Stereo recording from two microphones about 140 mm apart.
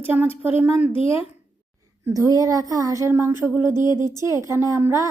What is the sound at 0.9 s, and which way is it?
Speech, 40° left (ahead or behind).